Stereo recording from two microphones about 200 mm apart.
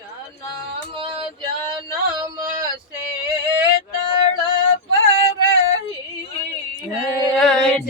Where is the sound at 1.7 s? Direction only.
20° right (ahead or behind).